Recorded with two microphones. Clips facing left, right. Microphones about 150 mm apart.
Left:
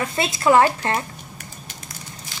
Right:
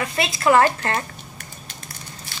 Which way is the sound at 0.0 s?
25° left (ahead or behind).